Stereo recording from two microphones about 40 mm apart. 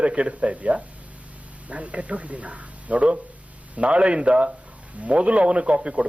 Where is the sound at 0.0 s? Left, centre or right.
Right.